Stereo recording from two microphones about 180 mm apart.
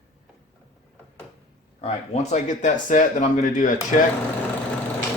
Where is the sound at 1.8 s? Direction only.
40° left (ahead or behind).